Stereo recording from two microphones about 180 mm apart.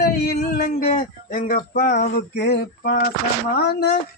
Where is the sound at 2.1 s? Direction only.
60° left (ahead or behind).